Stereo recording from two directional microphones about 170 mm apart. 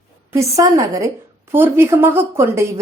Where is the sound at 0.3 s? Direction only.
20° right (ahead or behind).